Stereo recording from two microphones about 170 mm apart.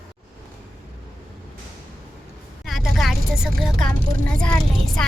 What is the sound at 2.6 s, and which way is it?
Vehicle, centre (ahead or behind).